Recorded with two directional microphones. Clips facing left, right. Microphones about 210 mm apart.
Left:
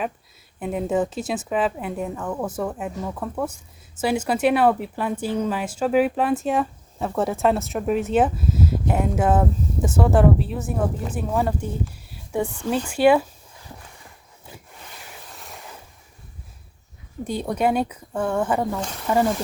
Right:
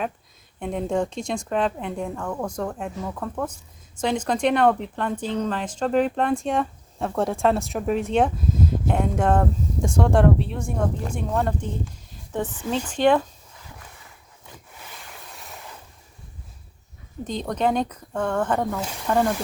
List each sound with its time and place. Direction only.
0.6 s speech: 5° left (ahead or behind)
17.2 s speech: 10° left (ahead or behind)